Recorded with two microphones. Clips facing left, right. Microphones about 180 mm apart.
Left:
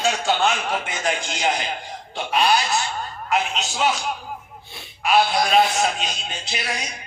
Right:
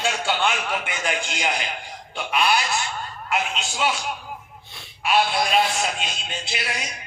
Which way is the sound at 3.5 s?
40° left (ahead or behind).